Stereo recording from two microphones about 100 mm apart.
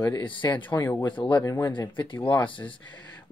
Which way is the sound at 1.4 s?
35° left (ahead or behind).